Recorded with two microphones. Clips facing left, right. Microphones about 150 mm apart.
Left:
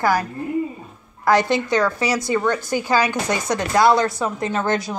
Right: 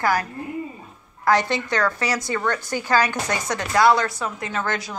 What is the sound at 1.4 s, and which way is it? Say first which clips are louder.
A woman's voice: left 4 dB; 10° left (ahead or behind).